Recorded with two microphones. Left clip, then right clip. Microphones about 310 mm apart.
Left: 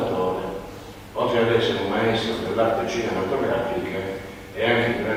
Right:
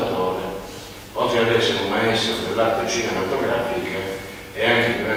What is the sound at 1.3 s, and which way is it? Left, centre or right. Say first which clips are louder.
A man's voice: right 2 dB; centre.